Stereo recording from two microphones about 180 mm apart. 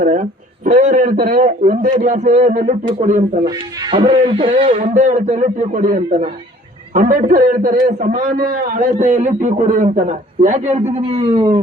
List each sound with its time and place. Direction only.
0.0 s a man's voice: 50° right (ahead or behind)
3.4 s speech: 25° right (ahead or behind)
4.5 s a man's voice: 45° right (ahead or behind); by 11.6 s 25° right (ahead or behind)